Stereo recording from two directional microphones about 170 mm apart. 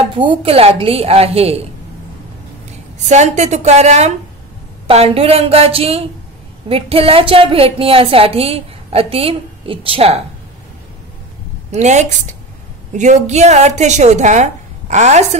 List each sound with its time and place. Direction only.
0.2 s a woman's voice: 30° right (ahead or behind)
3.1 s a woman's voice: 40° right (ahead or behind)
11.7 s a woman's voice: 45° right (ahead or behind)